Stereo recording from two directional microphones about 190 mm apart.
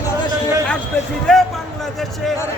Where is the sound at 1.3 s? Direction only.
5° left (ahead or behind).